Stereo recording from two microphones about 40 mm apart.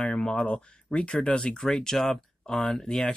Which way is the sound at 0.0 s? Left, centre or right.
Left.